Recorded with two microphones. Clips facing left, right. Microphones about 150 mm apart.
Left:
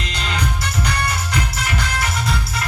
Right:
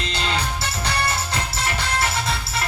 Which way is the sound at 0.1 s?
30° right (ahead or behind).